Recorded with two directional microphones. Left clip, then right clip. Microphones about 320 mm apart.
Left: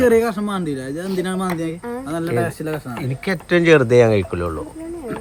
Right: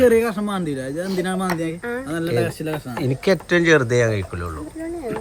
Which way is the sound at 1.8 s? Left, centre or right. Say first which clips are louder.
Right 2 dB; centre.